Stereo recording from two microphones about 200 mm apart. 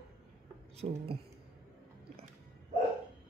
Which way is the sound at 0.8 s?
30° right (ahead or behind).